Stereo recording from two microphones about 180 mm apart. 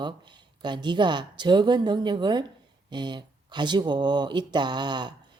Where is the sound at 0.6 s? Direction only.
25° right (ahead or behind).